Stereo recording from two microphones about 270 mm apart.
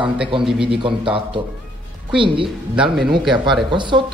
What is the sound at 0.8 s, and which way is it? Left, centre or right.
Speech, centre.